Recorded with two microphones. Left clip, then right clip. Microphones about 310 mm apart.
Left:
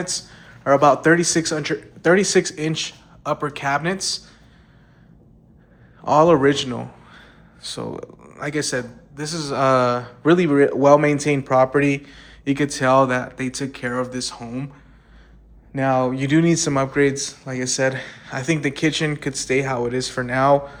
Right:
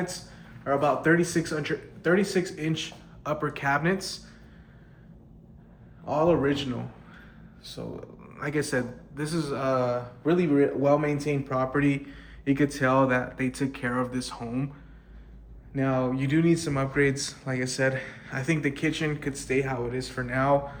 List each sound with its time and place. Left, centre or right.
0.6 s a man's voice: centre
6.1 s a man's voice: left
8.4 s a man's voice: centre
15.7 s a man's voice: centre